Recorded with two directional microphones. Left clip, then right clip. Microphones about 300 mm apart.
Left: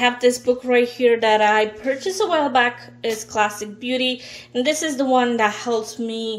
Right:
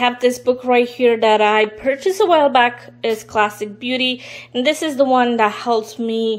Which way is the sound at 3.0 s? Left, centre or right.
Right.